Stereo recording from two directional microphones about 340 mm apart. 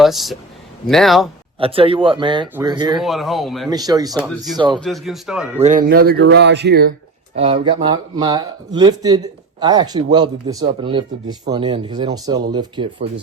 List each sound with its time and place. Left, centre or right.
0.0 s a man's voice: centre
1.5 s speech: centre
3.0 s a man's voice: centre
3.7 s speech: centre
4.8 s a man's voice: centre
5.6 s a sound: right
7.3 s speech: centre